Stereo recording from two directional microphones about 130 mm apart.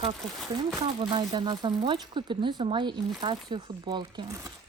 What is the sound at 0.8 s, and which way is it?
Speech, 35° right (ahead or behind).